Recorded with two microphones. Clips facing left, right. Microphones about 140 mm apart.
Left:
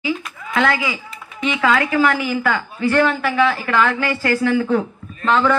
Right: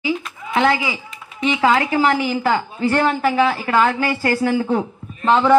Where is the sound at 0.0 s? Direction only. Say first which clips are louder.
Right 1 dB; 25° right (ahead or behind).